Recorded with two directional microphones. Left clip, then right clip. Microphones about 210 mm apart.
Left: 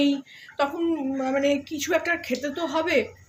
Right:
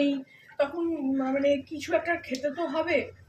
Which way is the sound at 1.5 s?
50° left (ahead or behind).